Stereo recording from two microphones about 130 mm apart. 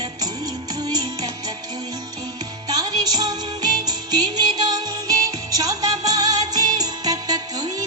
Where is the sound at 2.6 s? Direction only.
30° right (ahead or behind).